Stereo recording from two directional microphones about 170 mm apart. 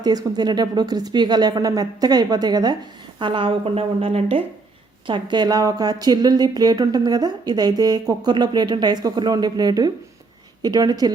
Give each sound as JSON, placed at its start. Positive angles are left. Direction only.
{"t": 0.0, "sound": "a woman's voice", "side_deg": -25}